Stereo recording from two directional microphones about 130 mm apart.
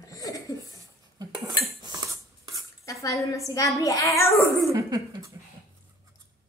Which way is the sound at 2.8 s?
25° left (ahead or behind).